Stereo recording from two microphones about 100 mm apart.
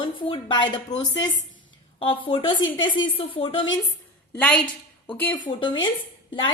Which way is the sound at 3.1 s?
65° left (ahead or behind).